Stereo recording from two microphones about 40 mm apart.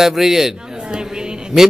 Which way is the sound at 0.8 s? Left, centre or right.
Right.